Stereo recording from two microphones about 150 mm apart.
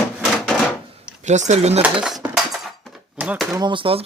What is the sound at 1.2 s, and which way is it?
Speech, 50° right (ahead or behind).